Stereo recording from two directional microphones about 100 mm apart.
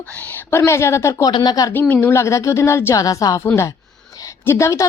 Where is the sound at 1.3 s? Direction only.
45° left (ahead or behind).